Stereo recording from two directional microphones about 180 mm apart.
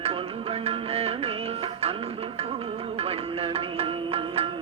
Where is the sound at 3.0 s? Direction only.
30° right (ahead or behind).